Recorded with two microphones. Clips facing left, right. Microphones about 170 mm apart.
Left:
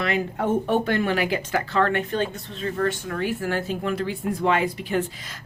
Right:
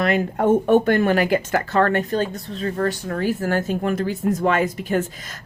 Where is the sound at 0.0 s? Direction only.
50° right (ahead or behind).